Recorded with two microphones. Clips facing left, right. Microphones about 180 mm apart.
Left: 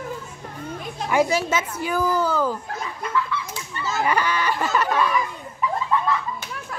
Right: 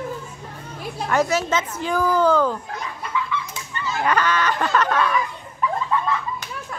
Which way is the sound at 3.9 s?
10° left (ahead or behind).